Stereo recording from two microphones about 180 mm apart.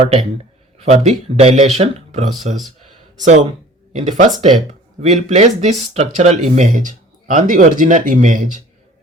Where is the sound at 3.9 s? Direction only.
40° right (ahead or behind).